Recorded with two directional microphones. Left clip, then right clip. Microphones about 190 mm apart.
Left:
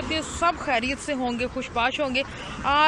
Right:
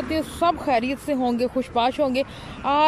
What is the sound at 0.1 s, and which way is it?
Speech, 25° right (ahead or behind).